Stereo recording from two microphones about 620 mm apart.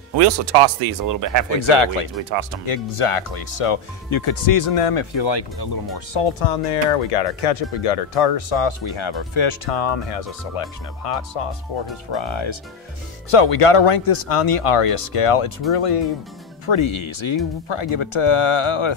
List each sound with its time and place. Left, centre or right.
0.5 s speech: right
1.5 s speech: left
6.4 s speech: left